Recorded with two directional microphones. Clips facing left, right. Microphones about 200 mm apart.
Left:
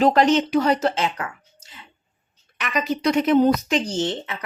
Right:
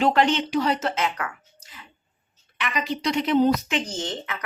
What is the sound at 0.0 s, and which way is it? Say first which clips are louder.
Speech: left 4 dB; 40° left (ahead or behind).